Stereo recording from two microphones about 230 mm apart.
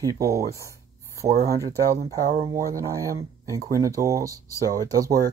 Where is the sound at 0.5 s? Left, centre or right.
Centre.